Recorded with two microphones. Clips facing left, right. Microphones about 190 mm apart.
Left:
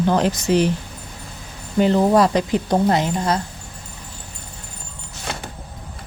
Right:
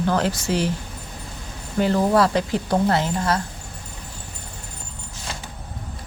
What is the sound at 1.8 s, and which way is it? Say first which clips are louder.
A woman's voice: left 3 dB; 20° left (ahead or behind).